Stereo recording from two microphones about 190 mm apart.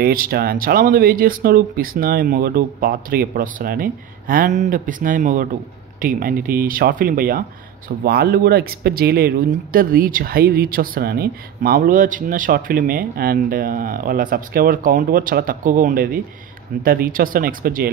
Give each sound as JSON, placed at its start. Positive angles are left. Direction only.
{"t": 0.0, "sound": "speech", "side_deg": -50}